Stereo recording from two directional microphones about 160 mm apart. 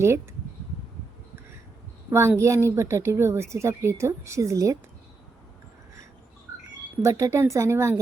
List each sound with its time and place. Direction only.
2.0 s a woman's voice: 15° right (ahead or behind)
7.0 s a woman's voice: 20° right (ahead or behind)